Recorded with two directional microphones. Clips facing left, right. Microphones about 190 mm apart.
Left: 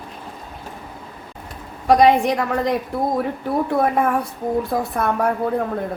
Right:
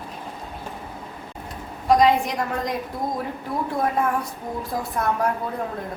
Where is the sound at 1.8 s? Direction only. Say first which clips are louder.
Left 4 dB; 70° left (ahead or behind).